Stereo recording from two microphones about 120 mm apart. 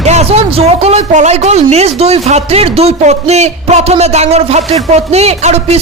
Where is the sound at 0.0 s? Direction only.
65° right (ahead or behind).